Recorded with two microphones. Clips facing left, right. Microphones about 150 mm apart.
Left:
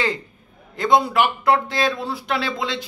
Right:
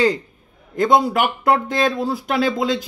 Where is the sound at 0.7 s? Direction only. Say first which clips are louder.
Right 2 dB; 45° right (ahead or behind).